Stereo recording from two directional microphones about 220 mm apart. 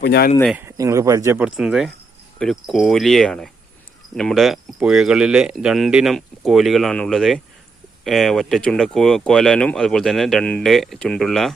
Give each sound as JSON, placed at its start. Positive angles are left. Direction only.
{"t": 0.0, "sound": "speech", "side_deg": 50}
{"t": 0.5, "sound": "speech", "side_deg": -10}
{"t": 1.5, "sound": "speech", "side_deg": 0}